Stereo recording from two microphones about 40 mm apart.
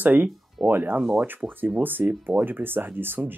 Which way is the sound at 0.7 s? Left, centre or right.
Right.